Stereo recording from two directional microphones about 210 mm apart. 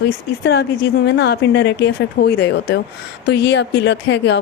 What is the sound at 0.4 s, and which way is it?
A woman's voice, 55° left (ahead or behind).